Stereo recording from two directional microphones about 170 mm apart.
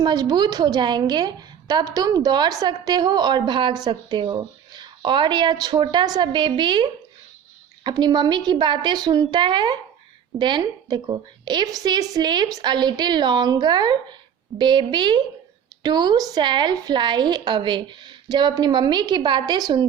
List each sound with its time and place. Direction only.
0.0 s a woman's voice: 25° right (ahead or behind)